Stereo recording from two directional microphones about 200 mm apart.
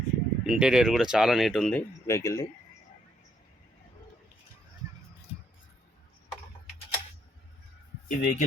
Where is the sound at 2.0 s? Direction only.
15° left (ahead or behind).